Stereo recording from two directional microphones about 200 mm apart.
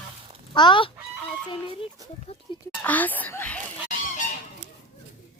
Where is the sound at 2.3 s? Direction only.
30° left (ahead or behind).